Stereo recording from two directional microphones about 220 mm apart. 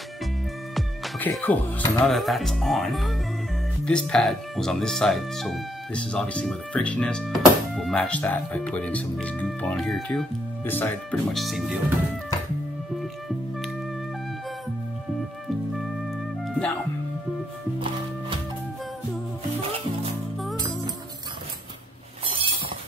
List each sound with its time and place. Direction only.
0.7 s speech: centre (ahead or behind)
16.4 s music: 5° left (ahead or behind)
20.5 s music: 15° right (ahead or behind)